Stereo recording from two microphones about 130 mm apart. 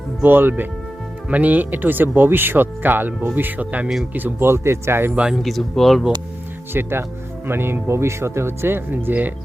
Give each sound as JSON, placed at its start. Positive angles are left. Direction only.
{"t": 0.2, "sound": "speech", "side_deg": -15}
{"t": 4.2, "sound": "speech", "side_deg": -20}
{"t": 6.8, "sound": "speech", "side_deg": -15}